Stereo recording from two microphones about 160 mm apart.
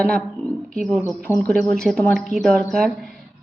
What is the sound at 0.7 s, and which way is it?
A woman's voice, 5° left (ahead or behind).